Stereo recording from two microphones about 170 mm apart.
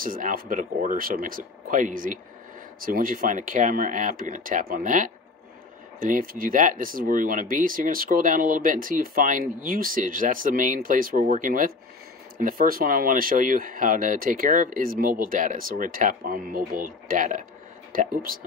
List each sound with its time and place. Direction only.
0.0 s speech: 55° right (ahead or behind)